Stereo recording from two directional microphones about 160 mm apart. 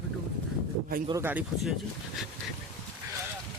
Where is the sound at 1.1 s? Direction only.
15° right (ahead or behind).